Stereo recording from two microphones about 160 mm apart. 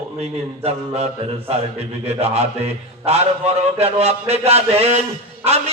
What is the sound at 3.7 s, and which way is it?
A man's voice, 40° right (ahead or behind).